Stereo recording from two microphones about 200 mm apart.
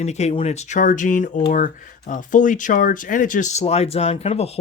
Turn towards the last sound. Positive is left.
turn(degrees=30)  # may be behind; listen again after turning